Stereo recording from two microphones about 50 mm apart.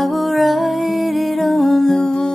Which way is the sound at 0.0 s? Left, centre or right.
Centre.